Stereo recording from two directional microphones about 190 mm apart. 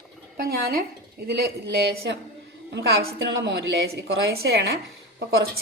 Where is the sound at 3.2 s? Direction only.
70° right (ahead or behind).